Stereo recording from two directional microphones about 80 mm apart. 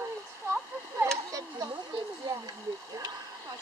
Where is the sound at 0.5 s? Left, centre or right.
Right.